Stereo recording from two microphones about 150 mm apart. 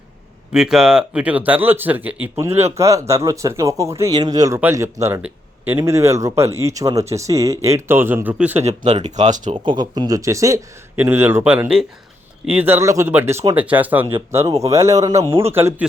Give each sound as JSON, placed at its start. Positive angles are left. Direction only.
{"t": 0.5, "sound": "speech", "side_deg": -5}
{"t": 8.6, "sound": "speech", "side_deg": -50}
{"t": 9.6, "sound": "speech", "side_deg": -30}